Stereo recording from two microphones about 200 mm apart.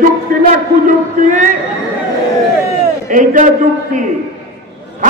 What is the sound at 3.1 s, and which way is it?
Speech, 40° right (ahead or behind).